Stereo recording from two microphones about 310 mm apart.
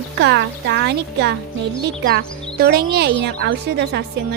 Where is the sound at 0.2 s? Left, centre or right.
Right.